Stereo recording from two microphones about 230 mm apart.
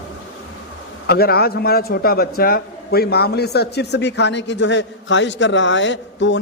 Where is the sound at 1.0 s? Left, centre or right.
Left.